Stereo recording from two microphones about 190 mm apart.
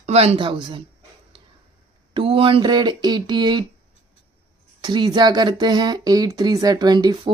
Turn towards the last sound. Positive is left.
turn(degrees=-25)  # may be behind; listen again after turning